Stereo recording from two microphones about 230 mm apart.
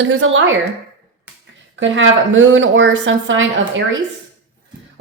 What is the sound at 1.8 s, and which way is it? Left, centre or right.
A woman's voice, right.